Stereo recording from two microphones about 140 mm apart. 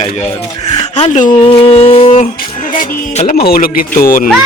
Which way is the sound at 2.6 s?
80° left.